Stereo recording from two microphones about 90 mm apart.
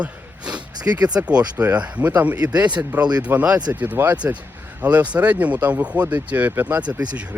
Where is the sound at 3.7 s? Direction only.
20° right (ahead or behind).